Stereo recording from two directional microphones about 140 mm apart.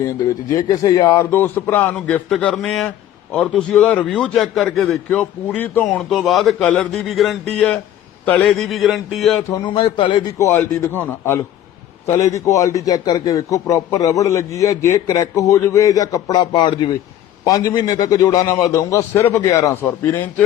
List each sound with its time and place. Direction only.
0.0 s a man's voice: 25° left (ahead or behind); by 9.4 s centre (ahead or behind)
9.7 s a man's voice: 40° left (ahead or behind)
10.3 s a man's voice: 20° left (ahead or behind)